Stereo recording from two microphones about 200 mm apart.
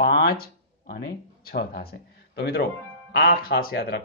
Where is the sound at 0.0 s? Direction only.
55° left (ahead or behind).